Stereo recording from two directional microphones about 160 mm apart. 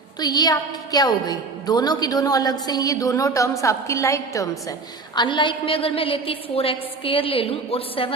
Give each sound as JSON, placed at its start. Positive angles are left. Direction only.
{"t": 0.2, "sound": "a woman's voice", "side_deg": 25}
{"t": 5.1, "sound": "a woman's voice", "side_deg": 30}